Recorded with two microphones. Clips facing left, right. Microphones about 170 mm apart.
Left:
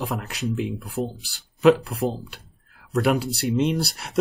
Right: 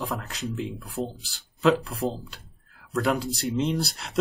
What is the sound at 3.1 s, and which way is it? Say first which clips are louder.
Speech: left 3 dB; 70° left (ahead or behind).